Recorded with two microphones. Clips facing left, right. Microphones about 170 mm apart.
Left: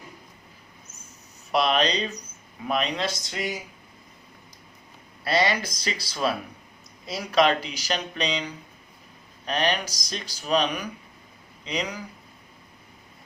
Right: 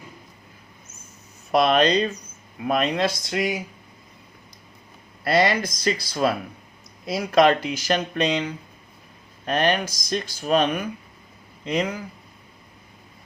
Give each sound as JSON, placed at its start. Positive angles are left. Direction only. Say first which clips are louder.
{"t": 1.5, "sound": "speech", "louder": "right 5 dB", "side_deg": -50}
{"t": 5.2, "sound": "speech", "louder": "right 4 dB", "side_deg": -55}